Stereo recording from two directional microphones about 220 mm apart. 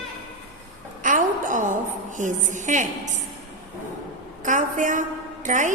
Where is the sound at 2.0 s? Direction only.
35° right (ahead or behind).